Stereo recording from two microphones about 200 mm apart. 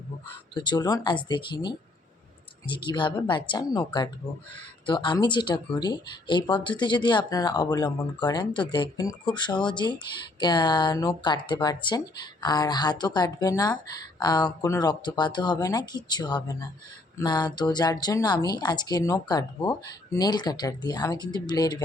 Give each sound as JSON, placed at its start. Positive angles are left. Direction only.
{"t": 0.5, "sound": "speech", "side_deg": 25}